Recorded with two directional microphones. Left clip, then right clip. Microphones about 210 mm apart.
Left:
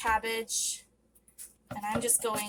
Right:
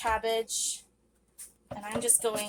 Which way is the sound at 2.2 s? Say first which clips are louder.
Right 1 dB; 15° right (ahead or behind).